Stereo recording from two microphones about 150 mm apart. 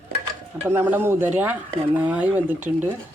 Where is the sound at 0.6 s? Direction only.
15° right (ahead or behind).